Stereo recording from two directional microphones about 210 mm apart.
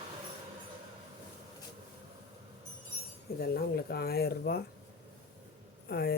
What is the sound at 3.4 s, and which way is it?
Speech, 45° left (ahead or behind).